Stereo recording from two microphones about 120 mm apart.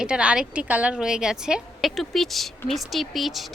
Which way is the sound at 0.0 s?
10° right (ahead or behind).